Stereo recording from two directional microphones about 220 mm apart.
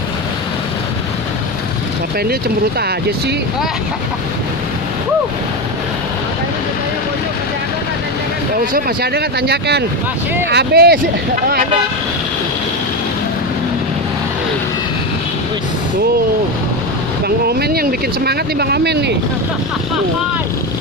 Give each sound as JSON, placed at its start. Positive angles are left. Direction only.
{"t": 8.7, "sound": "speech", "side_deg": -45}
{"t": 17.5, "sound": "speech", "side_deg": -45}